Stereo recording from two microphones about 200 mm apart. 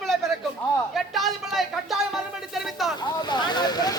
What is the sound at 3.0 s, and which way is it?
Boat, 20° left (ahead or behind).